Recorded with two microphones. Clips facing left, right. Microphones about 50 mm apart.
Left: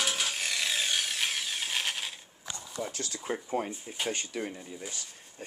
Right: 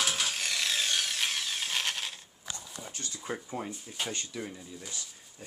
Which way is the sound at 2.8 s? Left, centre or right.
Left.